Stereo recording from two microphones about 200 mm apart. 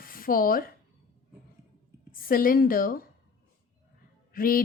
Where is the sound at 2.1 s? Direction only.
45° left (ahead or behind).